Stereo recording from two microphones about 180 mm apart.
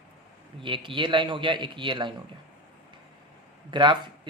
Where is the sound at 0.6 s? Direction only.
30° right (ahead or behind).